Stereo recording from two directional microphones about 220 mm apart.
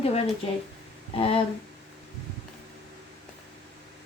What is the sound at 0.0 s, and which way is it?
A woman's voice, 30° left (ahead or behind).